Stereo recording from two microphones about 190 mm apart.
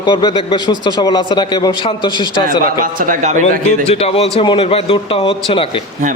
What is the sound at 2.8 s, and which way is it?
Speech, 45° right (ahead or behind).